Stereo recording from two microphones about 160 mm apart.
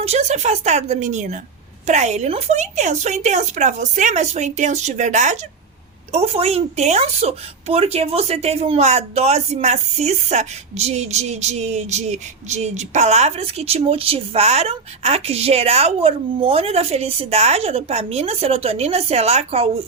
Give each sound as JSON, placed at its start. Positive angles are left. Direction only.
{"t": 0.0, "sound": "a woman's voice", "side_deg": -45}